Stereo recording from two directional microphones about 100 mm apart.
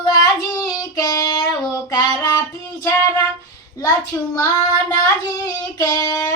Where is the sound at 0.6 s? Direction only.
40° left (ahead or behind).